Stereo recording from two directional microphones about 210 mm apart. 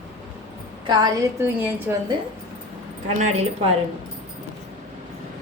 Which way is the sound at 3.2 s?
30° right (ahead or behind).